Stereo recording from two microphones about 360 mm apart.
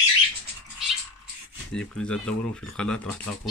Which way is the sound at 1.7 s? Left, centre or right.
Centre.